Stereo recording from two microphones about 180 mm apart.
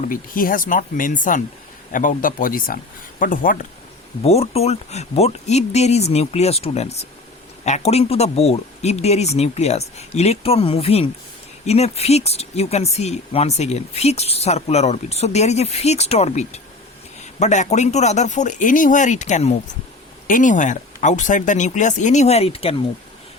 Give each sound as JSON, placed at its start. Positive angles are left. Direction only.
{"t": 0.1, "sound": "speech", "side_deg": 50}
{"t": 4.2, "sound": "speech", "side_deg": 35}